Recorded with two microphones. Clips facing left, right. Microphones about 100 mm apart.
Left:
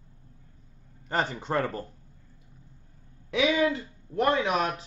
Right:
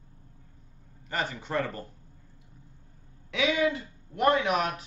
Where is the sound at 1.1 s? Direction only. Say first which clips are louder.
Left 3 dB; 40° left (ahead or behind).